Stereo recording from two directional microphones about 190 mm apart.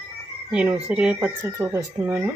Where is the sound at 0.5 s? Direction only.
5° right (ahead or behind).